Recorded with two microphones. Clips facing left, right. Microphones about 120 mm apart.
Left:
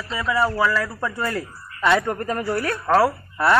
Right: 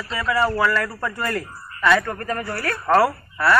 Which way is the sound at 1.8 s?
20° left (ahead or behind).